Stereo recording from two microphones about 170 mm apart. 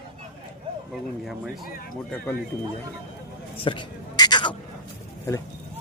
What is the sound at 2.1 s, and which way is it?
Speech, 10° left (ahead or behind).